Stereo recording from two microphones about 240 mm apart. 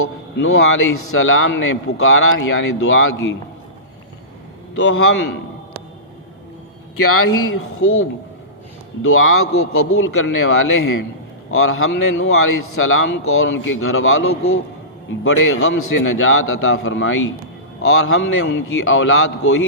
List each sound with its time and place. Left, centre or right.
0.0 s a man's voice: left
4.7 s a man's voice: left
7.1 s a man's voice: left